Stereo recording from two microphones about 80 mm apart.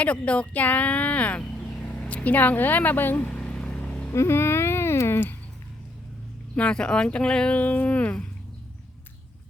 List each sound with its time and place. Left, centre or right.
0.0 s speech: centre
3.2 s vehicle: centre
4.1 s a sound: left
6.6 s speech: centre